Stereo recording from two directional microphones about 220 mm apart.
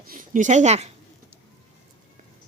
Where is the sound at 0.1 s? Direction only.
35° right (ahead or behind).